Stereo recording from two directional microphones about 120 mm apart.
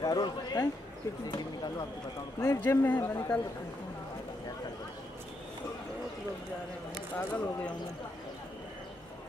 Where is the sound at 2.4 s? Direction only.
20° left (ahead or behind).